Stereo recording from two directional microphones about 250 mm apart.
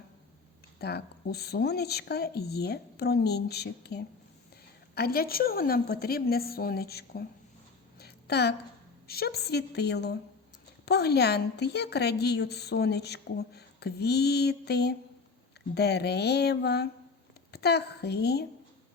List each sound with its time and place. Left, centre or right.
0.8 s a woman's voice: left
7.9 s a sound: left
9.0 s a woman's voice: left